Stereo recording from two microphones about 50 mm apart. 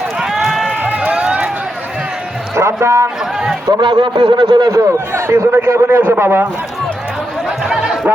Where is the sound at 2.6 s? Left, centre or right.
Right.